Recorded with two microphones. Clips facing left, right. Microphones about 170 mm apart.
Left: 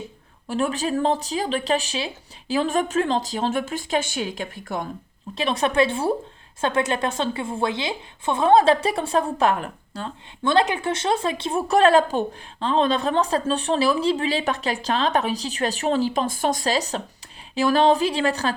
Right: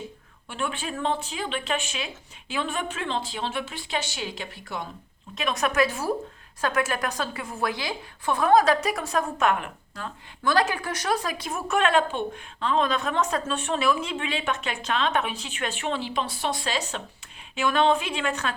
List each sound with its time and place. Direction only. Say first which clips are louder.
0.4 s a woman's voice: left 7 dB; 40° left (ahead or behind)
5.3 s a woman's voice: left 4 dB; 30° left (ahead or behind)